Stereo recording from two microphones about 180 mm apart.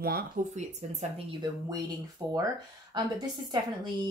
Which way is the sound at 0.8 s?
40° right (ahead or behind).